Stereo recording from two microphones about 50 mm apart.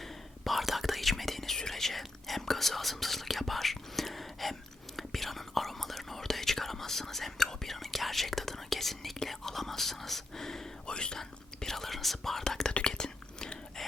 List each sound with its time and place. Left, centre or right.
0.0 s whispering: centre